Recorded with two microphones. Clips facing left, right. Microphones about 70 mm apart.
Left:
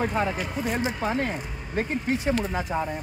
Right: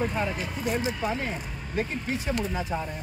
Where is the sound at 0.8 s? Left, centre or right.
Left.